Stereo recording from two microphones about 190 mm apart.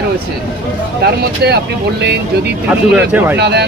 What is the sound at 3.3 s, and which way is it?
Speech, 60° right (ahead or behind).